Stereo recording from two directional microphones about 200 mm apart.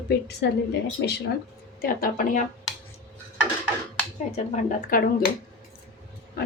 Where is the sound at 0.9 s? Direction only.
55° left (ahead or behind).